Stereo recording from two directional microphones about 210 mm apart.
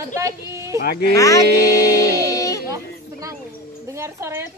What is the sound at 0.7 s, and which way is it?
Speech, 50° left (ahead or behind).